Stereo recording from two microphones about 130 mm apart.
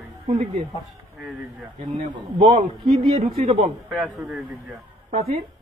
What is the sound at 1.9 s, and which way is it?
A man's voice, 60° right (ahead or behind).